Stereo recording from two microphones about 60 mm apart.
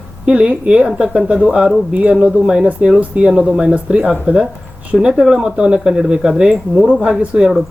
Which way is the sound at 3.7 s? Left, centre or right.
Right.